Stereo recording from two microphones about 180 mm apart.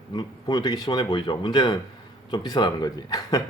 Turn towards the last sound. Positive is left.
turn(degrees=20)  # may be behind; listen again after turning